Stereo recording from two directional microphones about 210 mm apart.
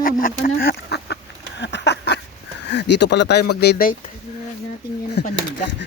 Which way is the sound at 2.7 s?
55° left (ahead or behind).